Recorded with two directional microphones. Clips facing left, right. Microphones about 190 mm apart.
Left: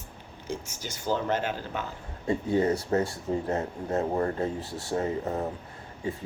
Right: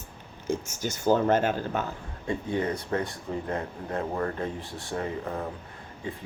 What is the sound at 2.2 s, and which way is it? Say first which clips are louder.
Speech: left 4 dB; 30° left (ahead or behind).